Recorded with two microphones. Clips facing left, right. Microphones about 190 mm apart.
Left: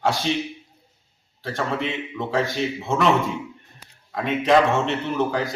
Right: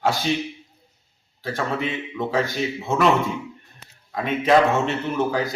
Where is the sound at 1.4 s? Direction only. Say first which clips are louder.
Even; centre (ahead or behind).